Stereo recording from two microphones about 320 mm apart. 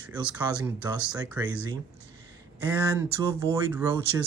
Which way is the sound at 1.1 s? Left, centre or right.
Centre.